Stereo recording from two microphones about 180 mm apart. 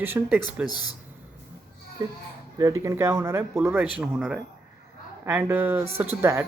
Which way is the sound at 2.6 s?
20° right (ahead or behind).